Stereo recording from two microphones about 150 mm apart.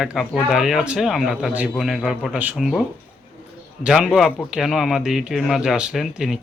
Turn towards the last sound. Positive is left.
turn(degrees=-5)  # may be behind; listen again after turning